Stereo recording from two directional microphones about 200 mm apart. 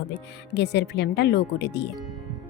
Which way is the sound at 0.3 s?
60° left (ahead or behind).